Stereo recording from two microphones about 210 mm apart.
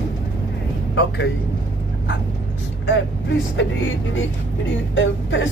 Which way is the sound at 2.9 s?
65° left (ahead or behind).